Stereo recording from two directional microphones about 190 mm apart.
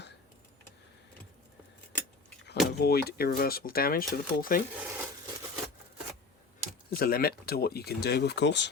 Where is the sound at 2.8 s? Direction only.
55° left (ahead or behind).